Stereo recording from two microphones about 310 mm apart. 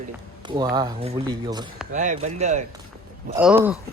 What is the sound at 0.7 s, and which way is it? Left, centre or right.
Speech, centre.